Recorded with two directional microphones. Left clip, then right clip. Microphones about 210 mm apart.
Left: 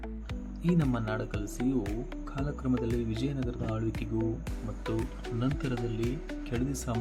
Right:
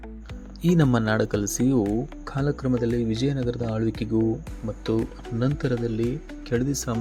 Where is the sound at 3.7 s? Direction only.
25° right (ahead or behind).